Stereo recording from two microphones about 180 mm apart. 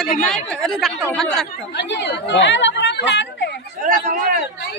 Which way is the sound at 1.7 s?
75° left (ahead or behind).